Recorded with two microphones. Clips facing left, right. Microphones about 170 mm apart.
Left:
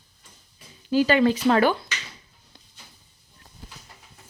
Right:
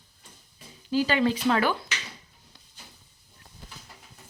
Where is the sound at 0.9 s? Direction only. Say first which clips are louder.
Left 5 dB; 55° left (ahead or behind).